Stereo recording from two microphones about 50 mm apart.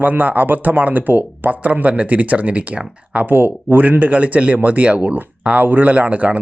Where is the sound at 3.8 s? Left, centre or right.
Right.